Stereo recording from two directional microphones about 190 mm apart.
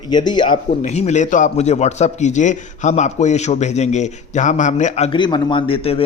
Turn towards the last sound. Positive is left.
turn(degrees=30)  # may be behind; listen again after turning